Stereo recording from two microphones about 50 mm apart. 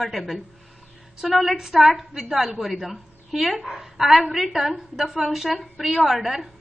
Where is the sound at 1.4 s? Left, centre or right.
Centre.